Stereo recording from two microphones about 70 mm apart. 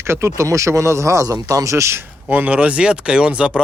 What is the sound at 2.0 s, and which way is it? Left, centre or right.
Speech, right.